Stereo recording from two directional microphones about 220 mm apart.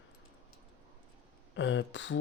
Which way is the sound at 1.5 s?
55° left (ahead or behind).